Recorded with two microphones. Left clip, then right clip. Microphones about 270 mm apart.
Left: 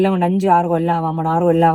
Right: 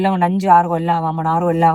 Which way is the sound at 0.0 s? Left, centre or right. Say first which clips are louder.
Even; right.